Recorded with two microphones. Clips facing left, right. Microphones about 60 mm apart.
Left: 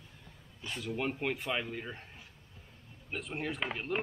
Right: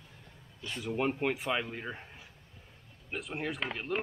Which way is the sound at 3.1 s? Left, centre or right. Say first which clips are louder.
Right 1 dB; centre.